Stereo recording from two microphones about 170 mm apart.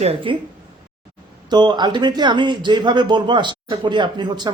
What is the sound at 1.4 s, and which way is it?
A man's voice, 25° right (ahead or behind).